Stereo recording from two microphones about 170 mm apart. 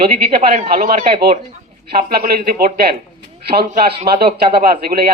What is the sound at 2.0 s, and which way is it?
Speech, 65° right (ahead or behind).